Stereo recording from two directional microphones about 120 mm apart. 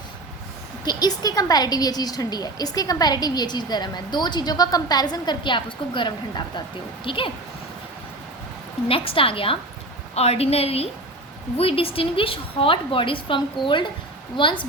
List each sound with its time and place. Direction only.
0.9 s a woman's voice: 35° left (ahead or behind)
8.9 s a woman's voice: 50° left (ahead or behind)